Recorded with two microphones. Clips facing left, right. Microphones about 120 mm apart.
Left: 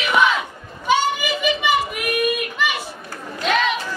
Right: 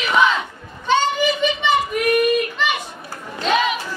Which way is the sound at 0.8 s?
10° left (ahead or behind).